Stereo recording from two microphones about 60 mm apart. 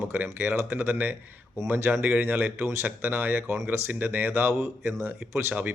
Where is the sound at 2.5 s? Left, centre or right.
Right.